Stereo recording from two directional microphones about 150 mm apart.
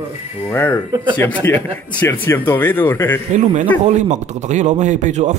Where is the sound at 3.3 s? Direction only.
55° right (ahead or behind).